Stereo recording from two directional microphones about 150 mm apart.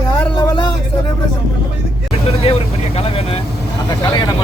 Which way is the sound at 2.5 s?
40° left (ahead or behind).